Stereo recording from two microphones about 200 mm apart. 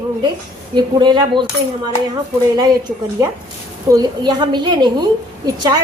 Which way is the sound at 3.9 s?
20° right (ahead or behind).